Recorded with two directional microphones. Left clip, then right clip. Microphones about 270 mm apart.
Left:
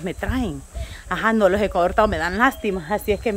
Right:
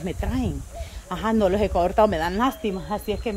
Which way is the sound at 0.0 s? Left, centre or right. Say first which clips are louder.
Left 3 dB; centre.